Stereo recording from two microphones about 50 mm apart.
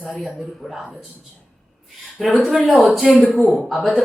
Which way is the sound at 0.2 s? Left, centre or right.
Centre.